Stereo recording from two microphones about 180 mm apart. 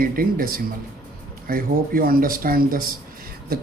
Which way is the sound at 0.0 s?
55° right (ahead or behind).